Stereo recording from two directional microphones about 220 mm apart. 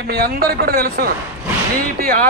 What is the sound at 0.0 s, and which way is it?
Speech, 45° right (ahead or behind).